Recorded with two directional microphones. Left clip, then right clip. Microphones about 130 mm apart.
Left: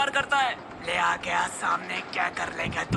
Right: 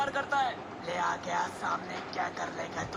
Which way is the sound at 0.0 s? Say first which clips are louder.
Left 6 dB; 15° left (ahead or behind).